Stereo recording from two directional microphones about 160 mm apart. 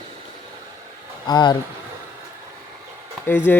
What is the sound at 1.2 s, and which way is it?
Speech, 25° left (ahead or behind).